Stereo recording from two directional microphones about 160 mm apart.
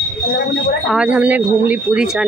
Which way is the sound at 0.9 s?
5° right (ahead or behind).